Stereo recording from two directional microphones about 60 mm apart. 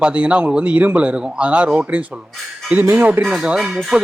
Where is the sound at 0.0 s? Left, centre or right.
Right.